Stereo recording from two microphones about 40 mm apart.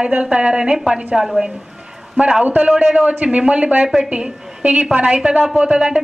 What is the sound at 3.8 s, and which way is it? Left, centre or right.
Speech, centre.